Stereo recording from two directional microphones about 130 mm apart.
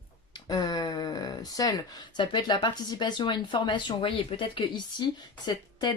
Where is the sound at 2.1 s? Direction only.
35° left (ahead or behind).